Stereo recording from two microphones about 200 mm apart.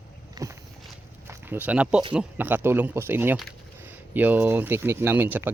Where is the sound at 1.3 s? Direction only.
10° right (ahead or behind).